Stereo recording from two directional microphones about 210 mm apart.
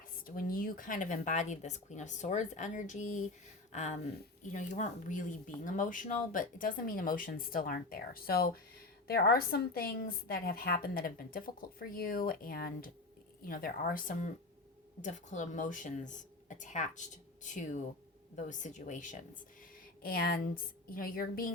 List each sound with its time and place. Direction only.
0.3 s a woman's voice: 45° left (ahead or behind)